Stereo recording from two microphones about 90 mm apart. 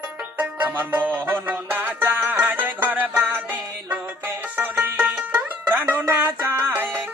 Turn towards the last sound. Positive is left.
turn(degrees=-25)  # may be behind; listen again after turning